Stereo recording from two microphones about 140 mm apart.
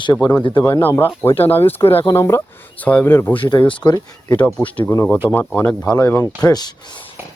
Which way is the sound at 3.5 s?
35° left (ahead or behind).